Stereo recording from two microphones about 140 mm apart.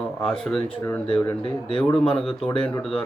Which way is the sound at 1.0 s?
35° left (ahead or behind).